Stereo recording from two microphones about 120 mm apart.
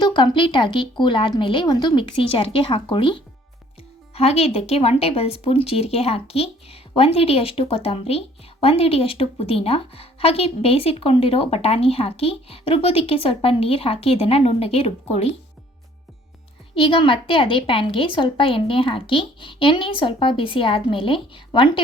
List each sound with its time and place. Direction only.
0.0 s a woman's voice: 40° left (ahead or behind)
4.1 s a woman's voice: 60° left (ahead or behind)
16.7 s a woman's voice: 50° left (ahead or behind)